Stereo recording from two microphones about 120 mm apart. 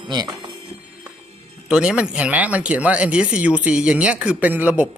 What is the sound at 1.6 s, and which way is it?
Speech, 5° right (ahead or behind).